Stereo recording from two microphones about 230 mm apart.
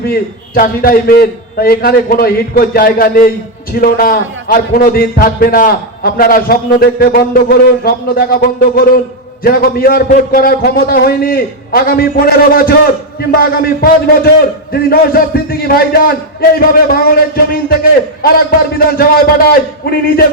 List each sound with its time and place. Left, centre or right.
0.0 s a man's voice: left
18.9 s a man's voice: left